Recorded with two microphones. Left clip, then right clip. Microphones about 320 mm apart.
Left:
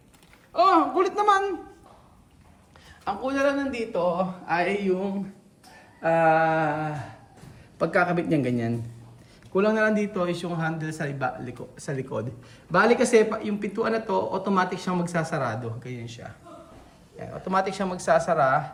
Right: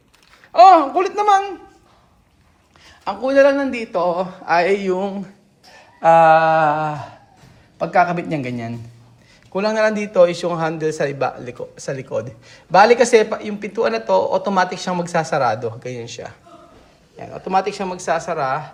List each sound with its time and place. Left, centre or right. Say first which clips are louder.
0.5 s a man's voice: right 10 dB; right
2.8 s a man's voice: right 7 dB; centre
6.1 s mantra: right 9 dB; right
7.8 s a man's voice: right 7 dB; centre
9.6 s a man's voice: right 5 dB; centre